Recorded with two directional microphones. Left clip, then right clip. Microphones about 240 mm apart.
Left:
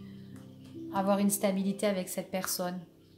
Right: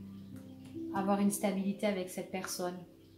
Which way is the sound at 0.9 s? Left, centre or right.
Left.